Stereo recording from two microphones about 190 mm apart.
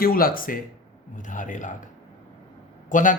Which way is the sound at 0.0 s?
50° left (ahead or behind).